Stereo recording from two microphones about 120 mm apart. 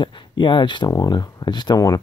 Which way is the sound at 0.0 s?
40° left (ahead or behind).